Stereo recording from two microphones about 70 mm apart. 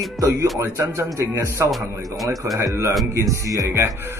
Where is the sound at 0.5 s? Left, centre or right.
Right.